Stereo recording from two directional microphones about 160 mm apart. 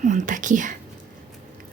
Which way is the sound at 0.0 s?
50° right (ahead or behind).